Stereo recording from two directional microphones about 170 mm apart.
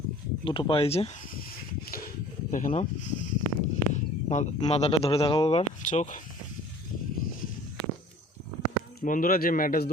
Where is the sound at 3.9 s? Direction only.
45° left (ahead or behind).